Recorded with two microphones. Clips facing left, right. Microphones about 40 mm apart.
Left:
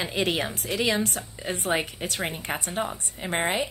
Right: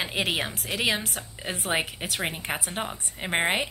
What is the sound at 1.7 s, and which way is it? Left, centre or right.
Speech, right.